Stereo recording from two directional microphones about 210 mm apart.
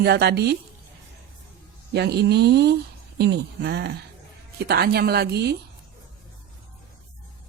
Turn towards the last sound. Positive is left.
turn(degrees=-50)  # may be behind; listen again after turning